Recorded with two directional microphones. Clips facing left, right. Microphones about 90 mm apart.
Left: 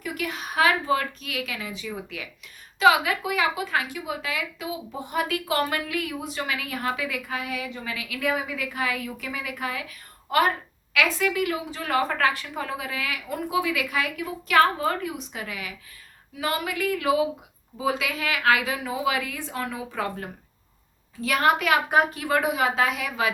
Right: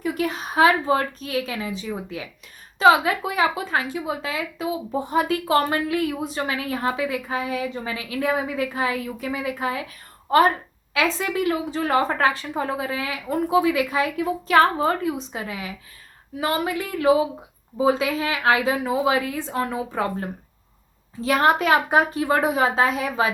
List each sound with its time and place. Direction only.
0.0 s a woman's voice: 30° right (ahead or behind)